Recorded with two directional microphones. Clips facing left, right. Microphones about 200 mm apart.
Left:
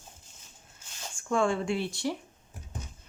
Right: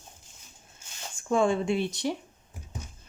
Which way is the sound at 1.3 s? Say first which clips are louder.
Right 3 dB; 20° right (ahead or behind).